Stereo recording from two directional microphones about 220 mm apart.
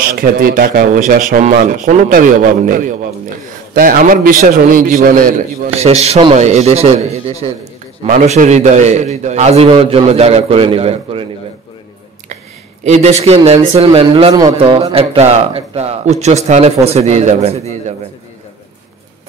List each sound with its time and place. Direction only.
0.0 s speech: 40° right (ahead or behind)
5.8 s a man's voice: 30° right (ahead or behind)
12.8 s a man's voice: 30° right (ahead or behind)